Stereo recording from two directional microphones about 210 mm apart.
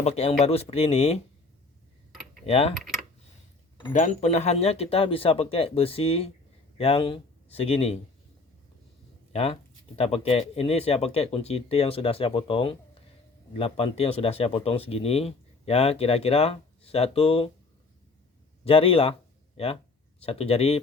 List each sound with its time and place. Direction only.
0.0 s speech: 30° left (ahead or behind)
2.5 s speech: 30° left (ahead or behind)
3.9 s speech: 35° left (ahead or behind)
9.3 s speech: 30° left (ahead or behind)
18.6 s speech: 25° left (ahead or behind)